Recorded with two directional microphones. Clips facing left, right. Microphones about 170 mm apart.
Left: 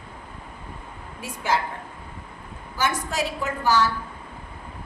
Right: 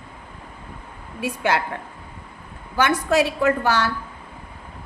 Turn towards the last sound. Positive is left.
turn(degrees=-65)  # may be behind; listen again after turning